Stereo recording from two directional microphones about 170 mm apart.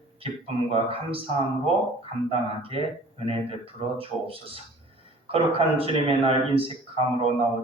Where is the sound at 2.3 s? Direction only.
35° right (ahead or behind).